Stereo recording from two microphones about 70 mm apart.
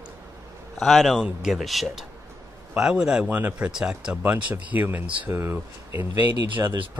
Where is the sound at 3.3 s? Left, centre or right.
Right.